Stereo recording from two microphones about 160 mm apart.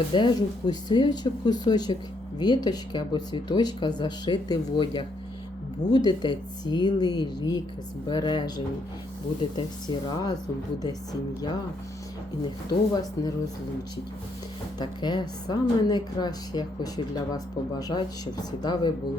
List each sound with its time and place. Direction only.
0.1 s speech: 30° left (ahead or behind)
12.9 s speech: 25° left (ahead or behind)
14.8 s speech: 25° left (ahead or behind)